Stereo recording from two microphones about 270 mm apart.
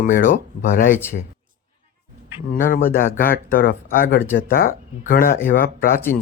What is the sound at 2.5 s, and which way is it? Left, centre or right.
Speech, left.